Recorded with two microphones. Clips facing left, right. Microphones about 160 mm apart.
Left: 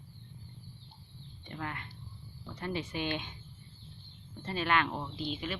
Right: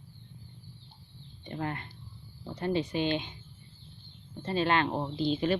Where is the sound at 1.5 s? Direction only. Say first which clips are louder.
Right 6 dB; 35° right (ahead or behind).